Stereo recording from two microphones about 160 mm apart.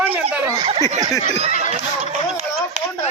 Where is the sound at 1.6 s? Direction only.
40° right (ahead or behind).